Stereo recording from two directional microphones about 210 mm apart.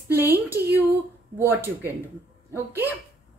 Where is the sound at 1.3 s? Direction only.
10° right (ahead or behind).